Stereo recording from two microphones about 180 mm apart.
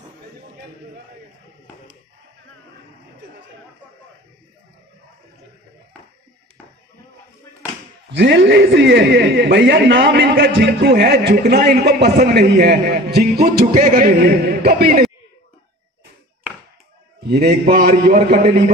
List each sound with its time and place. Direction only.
8.1 s a man's voice: 80° right; by 15.0 s 55° right (ahead or behind)
17.2 s a man's voice: 60° right (ahead or behind)